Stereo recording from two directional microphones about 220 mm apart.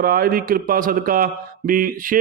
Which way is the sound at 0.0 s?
45° right (ahead or behind).